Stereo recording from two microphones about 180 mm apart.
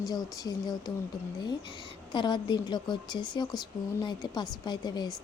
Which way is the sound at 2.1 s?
25° left (ahead or behind).